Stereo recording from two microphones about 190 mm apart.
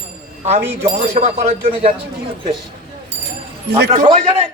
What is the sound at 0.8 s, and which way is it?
A man's voice, 35° right (ahead or behind).